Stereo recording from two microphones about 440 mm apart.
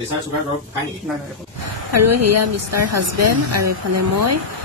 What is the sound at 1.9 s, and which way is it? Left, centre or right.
Speech, right.